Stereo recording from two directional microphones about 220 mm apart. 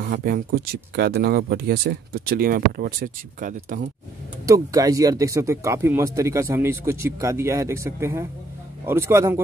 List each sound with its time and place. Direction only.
0.0 s speech: 40° right (ahead or behind)
4.5 s speech: 15° right (ahead or behind)